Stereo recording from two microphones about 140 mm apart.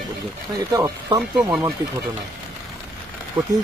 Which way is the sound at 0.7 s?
20° right (ahead or behind).